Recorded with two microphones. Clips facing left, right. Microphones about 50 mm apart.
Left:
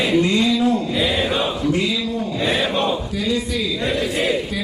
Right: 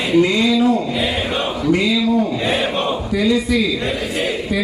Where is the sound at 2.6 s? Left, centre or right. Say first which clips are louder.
Even; right.